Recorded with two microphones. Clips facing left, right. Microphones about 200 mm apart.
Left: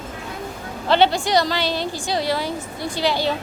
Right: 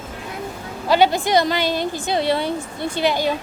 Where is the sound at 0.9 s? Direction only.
15° right (ahead or behind).